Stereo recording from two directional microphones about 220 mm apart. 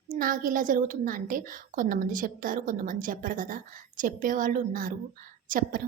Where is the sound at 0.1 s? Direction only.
40° right (ahead or behind).